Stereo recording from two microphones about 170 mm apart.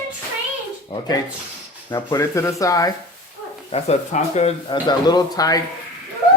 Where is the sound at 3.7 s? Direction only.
35° left (ahead or behind).